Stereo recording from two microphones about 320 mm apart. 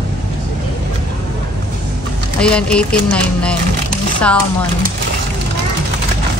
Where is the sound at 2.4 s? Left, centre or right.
Centre.